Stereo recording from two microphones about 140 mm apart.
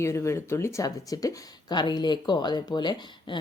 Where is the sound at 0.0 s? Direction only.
20° left (ahead or behind).